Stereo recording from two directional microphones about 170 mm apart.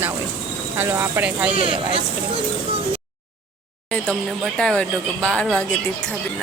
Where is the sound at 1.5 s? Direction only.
35° right (ahead or behind).